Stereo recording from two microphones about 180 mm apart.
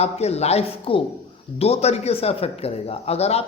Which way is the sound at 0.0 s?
35° left (ahead or behind).